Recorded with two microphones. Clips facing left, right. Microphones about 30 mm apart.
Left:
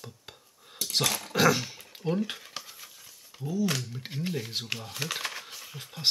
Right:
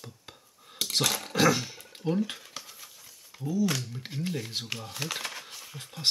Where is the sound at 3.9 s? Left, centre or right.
Centre.